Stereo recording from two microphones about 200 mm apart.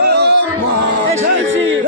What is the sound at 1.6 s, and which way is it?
Music, 70° right (ahead or behind).